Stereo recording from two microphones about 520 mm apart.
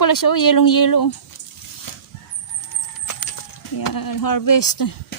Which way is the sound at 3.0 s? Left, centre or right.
Left.